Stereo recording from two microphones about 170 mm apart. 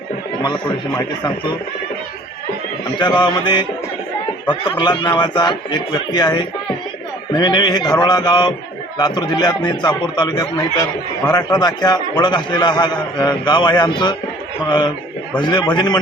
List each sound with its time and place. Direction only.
0.4 s a man's voice: 25° left (ahead or behind)
3.0 s a man's voice: 25° left (ahead or behind)